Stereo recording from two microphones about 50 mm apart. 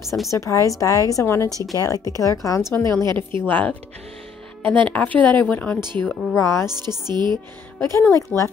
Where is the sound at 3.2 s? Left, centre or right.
Left.